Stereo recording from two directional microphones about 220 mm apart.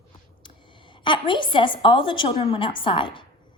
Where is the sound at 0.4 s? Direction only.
20° left (ahead or behind).